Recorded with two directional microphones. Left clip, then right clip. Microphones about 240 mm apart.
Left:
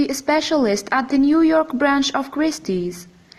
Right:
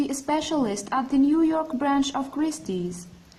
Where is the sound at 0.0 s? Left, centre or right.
Left.